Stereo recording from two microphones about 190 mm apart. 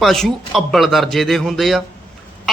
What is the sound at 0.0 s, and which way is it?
A man's voice, centre (ahead or behind).